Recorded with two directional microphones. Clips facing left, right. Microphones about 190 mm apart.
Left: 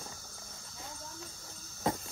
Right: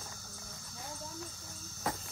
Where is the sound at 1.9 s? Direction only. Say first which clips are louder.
Left 5 dB; 25° left (ahead or behind).